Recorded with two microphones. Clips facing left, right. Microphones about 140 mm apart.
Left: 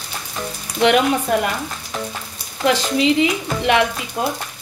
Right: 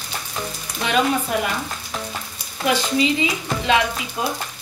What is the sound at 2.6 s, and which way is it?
Speech, 80° left.